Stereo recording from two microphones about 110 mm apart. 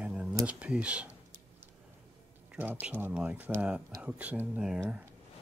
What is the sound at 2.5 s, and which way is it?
Speech, 15° right (ahead or behind).